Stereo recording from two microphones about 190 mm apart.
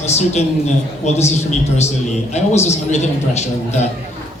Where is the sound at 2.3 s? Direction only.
35° left (ahead or behind).